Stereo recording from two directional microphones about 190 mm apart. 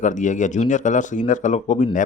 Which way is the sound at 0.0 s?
40° left (ahead or behind).